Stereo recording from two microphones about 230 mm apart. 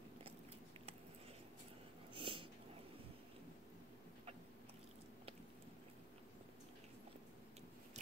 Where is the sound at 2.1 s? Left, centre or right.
Right.